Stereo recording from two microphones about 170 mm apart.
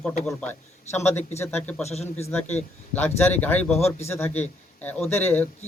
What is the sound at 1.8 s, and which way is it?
Speech, 40° left (ahead or behind).